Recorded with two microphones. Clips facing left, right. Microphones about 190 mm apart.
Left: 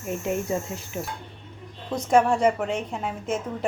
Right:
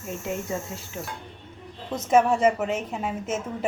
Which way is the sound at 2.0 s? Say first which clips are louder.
Even; 5° right (ahead or behind).